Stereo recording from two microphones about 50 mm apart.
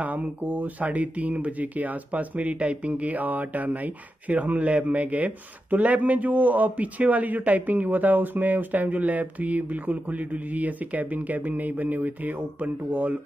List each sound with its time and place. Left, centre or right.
0.0 s speech: right